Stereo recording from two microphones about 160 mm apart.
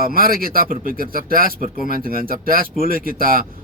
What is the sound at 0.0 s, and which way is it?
Speech, 65° right (ahead or behind).